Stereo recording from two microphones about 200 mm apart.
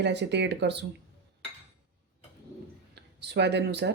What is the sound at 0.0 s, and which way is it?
Speech, 60° right (ahead or behind).